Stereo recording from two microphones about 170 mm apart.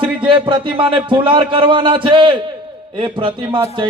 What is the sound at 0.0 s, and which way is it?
A man's voice, 30° right (ahead or behind).